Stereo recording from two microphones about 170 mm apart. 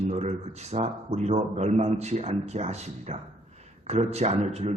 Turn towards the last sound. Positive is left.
turn(degrees=-40)  # may be behind; listen again after turning